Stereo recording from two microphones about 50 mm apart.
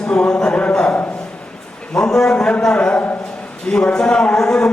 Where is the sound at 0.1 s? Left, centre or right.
Centre.